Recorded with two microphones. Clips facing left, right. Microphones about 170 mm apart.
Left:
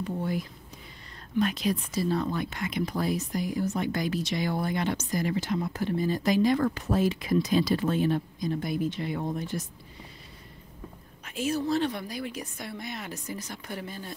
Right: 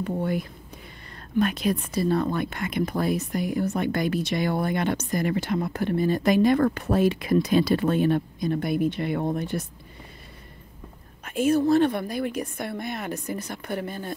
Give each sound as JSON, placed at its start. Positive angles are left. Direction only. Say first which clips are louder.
{"t": 0.0, "sound": "speech", "louder": "right 4 dB", "side_deg": -60}
{"t": 11.2, "sound": "speech", "louder": "right 8 dB", "side_deg": -55}